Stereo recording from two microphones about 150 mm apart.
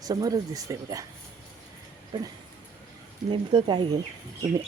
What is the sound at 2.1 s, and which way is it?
Speech, 30° right (ahead or behind).